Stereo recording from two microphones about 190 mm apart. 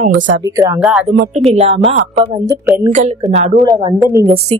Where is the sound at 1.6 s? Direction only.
35° right (ahead or behind).